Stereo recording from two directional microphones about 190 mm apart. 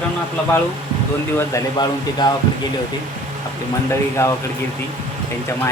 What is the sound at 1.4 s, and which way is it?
Speech, 20° left (ahead or behind).